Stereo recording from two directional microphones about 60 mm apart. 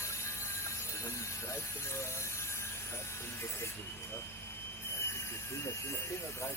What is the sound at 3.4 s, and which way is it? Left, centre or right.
Speech, left.